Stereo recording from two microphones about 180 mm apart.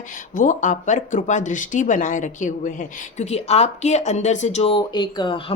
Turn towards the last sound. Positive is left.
turn(degrees=30)  # may be behind; listen again after turning